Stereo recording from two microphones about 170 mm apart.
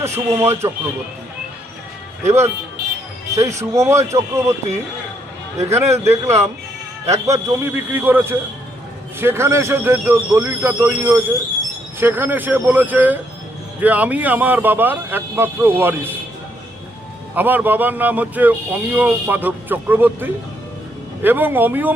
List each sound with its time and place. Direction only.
0.0 s speech: 15° right (ahead or behind)
2.2 s speech: 15° right (ahead or behind)
5.6 s speech: 15° right (ahead or behind)
17.3 s speech: 10° right (ahead or behind)